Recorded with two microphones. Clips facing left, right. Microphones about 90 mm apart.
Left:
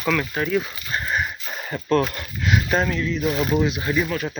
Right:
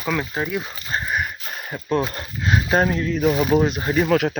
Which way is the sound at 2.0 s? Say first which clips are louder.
Right 1 dB; 30° right (ahead or behind).